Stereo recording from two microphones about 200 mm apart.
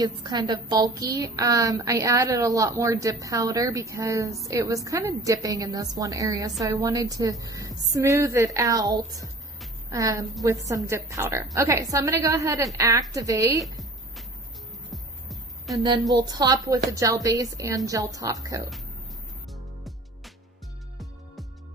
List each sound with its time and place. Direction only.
0.0 s a woman's voice: 20° right (ahead or behind)
13.6 s music: centre (ahead or behind)
16.1 s a woman's voice: 20° right (ahead or behind)